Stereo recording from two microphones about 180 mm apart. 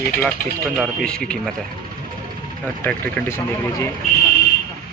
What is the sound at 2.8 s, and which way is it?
Speech, 10° left (ahead or behind).